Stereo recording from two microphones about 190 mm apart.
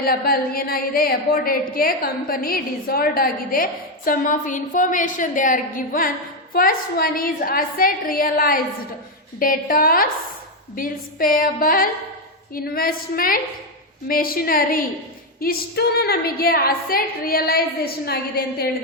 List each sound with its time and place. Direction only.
0.0 s a woman's voice: 50° left (ahead or behind)